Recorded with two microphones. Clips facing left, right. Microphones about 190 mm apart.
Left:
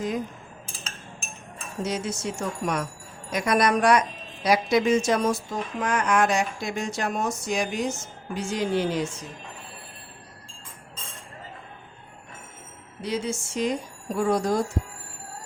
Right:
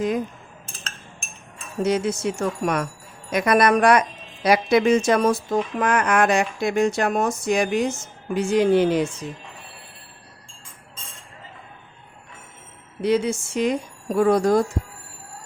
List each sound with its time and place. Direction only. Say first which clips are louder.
1.8 s speech: right 7 dB; 60° right (ahead or behind)
13.0 s speech: right 8 dB; 60° right (ahead or behind)